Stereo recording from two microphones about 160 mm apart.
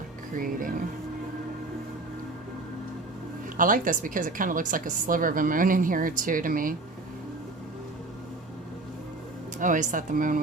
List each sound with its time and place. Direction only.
0.3 s a woman's voice: 60° right (ahead or behind)
3.6 s a woman's voice: 55° right (ahead or behind)
9.6 s a woman's voice: 55° right (ahead or behind)